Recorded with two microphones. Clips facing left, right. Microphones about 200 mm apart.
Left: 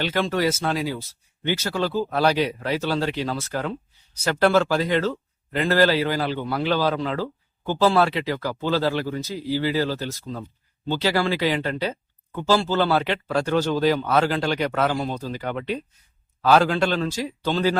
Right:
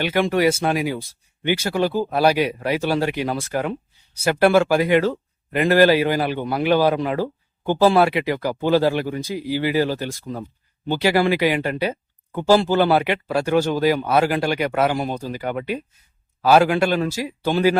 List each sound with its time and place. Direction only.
0.0 s a man's voice: 10° right (ahead or behind)